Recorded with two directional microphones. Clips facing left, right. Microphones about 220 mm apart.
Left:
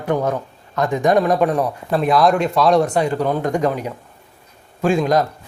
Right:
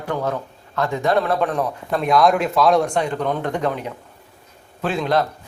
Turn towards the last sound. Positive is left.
turn(degrees=10)  # may be behind; listen again after turning